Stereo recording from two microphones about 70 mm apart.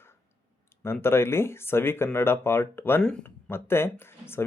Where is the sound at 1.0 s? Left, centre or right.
Left.